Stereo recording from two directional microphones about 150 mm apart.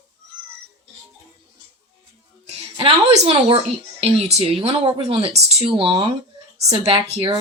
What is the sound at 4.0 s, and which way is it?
Speech, 40° right (ahead or behind).